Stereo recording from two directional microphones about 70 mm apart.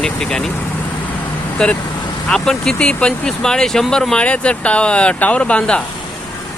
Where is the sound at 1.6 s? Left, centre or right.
Centre.